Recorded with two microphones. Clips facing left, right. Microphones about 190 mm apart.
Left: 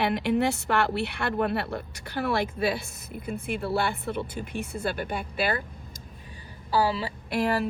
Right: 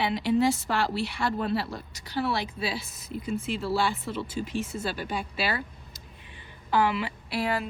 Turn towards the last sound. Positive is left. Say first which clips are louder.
# left 3 dB
turn(degrees=50)  # may be behind; listen again after turning